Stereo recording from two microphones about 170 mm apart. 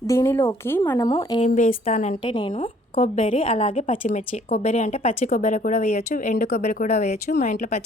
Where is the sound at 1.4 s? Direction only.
45° left (ahead or behind).